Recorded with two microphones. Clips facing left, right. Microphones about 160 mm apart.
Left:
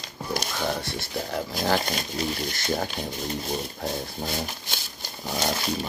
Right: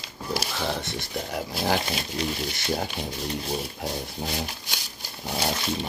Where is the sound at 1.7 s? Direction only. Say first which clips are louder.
Left 2 dB; centre (ahead or behind).